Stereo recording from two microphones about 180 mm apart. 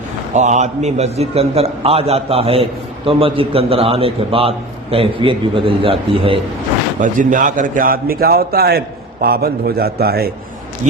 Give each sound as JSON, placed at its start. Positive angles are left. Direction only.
{"t": 0.3, "sound": "a man's voice", "side_deg": -40}
{"t": 7.0, "sound": "a man's voice", "side_deg": -45}